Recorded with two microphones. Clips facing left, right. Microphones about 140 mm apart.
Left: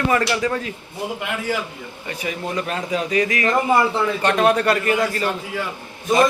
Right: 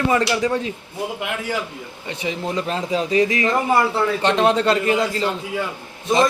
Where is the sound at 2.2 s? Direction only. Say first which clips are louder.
Right 2 dB; 25° right (ahead or behind).